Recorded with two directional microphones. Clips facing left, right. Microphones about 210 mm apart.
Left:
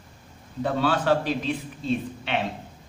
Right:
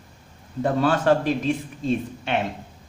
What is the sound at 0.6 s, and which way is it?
A man's voice, 50° right (ahead or behind).